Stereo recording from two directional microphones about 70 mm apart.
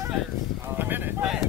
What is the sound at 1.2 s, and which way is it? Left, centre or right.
Speech, centre.